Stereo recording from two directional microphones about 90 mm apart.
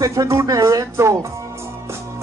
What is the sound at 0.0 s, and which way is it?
Music, 40° right (ahead or behind).